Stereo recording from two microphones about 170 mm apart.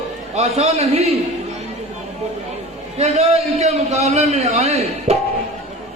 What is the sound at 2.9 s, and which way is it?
A man's voice, 40° right (ahead or behind).